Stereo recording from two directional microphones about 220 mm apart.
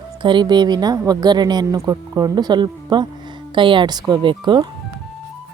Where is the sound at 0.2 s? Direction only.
20° right (ahead or behind).